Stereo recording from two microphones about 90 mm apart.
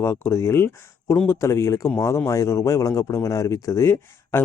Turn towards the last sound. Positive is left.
turn(degrees=25)  # may be behind; listen again after turning